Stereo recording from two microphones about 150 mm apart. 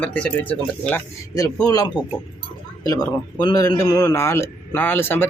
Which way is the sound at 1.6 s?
25° left (ahead or behind).